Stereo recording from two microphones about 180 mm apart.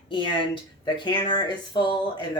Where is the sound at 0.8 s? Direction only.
25° left (ahead or behind).